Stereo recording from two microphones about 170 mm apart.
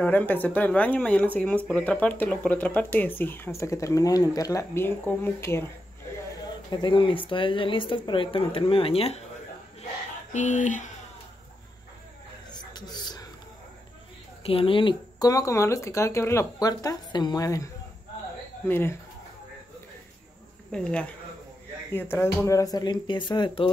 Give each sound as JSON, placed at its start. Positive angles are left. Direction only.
{"t": 0.0, "sound": "speech", "side_deg": 10}
{"t": 6.7, "sound": "speech", "side_deg": 25}
{"t": 10.3, "sound": "speech", "side_deg": 45}
{"t": 12.4, "sound": "whispering", "side_deg": 25}
{"t": 14.4, "sound": "speech", "side_deg": 35}
{"t": 18.7, "sound": "speech", "side_deg": 15}
{"t": 20.7, "sound": "speech", "side_deg": 5}